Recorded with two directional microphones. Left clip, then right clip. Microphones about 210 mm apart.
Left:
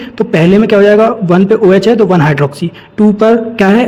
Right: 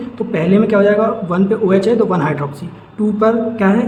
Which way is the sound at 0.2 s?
40° left (ahead or behind).